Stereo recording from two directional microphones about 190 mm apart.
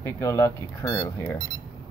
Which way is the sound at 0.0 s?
15° left (ahead or behind).